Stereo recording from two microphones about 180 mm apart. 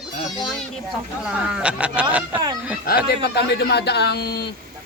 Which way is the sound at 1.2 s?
5° right (ahead or behind).